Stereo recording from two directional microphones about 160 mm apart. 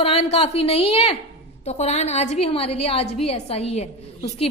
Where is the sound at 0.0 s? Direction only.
40° left (ahead or behind).